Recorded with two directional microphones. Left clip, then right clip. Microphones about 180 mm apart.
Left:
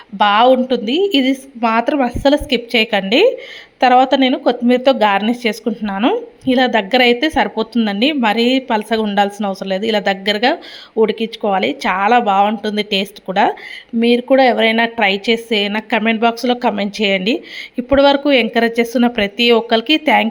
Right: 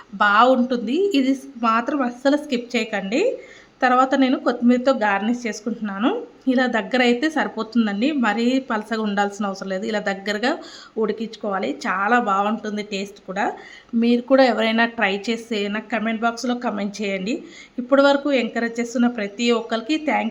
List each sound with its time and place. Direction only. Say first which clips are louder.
0.2 s speech: left 4 dB; 15° left (ahead or behind)
3.8 s speech: left 6 dB; 15° left (ahead or behind)
14.0 s a woman's voice: left 5 dB; 15° left (ahead or behind)